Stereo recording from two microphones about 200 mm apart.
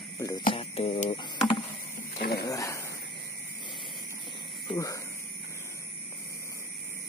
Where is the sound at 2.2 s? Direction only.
50° left (ahead or behind).